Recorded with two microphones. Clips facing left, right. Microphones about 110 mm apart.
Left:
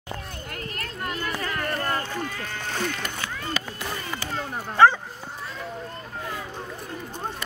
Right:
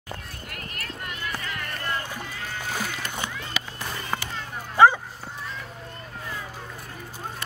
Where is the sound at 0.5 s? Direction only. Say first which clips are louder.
Left 2 dB; 30° left (ahead or behind).